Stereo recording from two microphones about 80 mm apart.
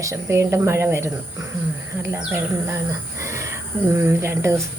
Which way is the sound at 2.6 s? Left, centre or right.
Right.